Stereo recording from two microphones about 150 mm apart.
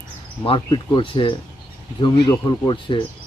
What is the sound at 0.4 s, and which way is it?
Speech, 35° left (ahead or behind).